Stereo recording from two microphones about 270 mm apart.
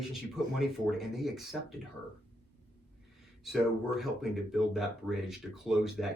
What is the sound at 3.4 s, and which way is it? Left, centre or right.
Speech, centre.